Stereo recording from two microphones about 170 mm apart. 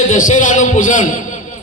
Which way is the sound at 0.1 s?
45° left (ahead or behind).